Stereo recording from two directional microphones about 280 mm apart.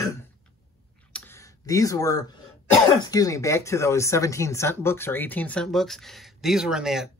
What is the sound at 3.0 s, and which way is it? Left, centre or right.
Speech, centre.